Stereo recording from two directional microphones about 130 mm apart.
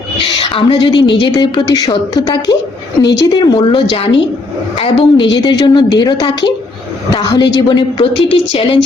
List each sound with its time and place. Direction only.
0.5 s a woman's voice: 40° left (ahead or behind)